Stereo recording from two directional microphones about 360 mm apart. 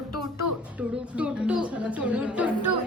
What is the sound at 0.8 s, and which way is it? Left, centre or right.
A woman's voice, centre.